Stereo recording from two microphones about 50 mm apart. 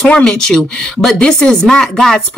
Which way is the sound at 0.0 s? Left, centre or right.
Centre.